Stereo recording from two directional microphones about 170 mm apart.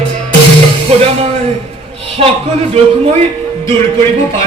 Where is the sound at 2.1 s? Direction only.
35° right (ahead or behind).